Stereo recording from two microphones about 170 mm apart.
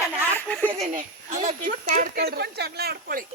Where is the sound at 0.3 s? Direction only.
10° left (ahead or behind).